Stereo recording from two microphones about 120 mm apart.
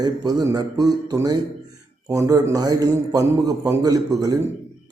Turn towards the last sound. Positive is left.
turn(degrees=-30)  # may be behind; listen again after turning